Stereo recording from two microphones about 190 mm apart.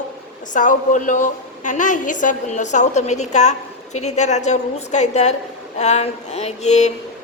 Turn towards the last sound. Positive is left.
turn(degrees=35)  # may be behind; listen again after turning